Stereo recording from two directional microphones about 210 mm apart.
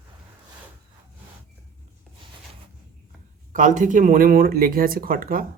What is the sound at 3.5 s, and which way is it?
Speech, 35° right (ahead or behind).